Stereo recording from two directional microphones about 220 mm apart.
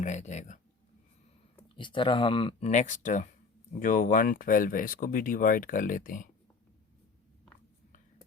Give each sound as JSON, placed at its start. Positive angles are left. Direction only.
{"t": 0.0, "sound": "speech", "side_deg": 35}
{"t": 1.7, "sound": "speech", "side_deg": 20}